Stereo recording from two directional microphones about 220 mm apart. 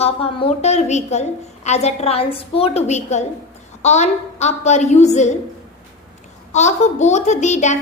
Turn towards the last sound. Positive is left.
turn(degrees=30)  # may be behind; listen again after turning